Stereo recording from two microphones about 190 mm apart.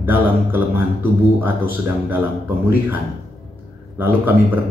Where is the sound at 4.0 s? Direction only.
10° right (ahead or behind).